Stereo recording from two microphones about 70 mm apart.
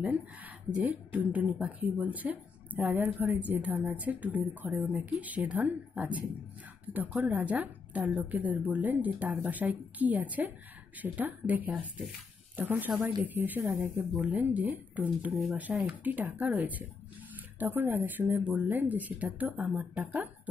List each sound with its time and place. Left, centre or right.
0.0 s a woman's voice: right